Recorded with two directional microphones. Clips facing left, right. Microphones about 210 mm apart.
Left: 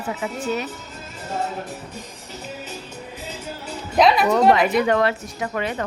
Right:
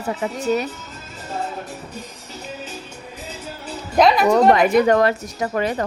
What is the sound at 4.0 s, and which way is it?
Speech, centre (ahead or behind).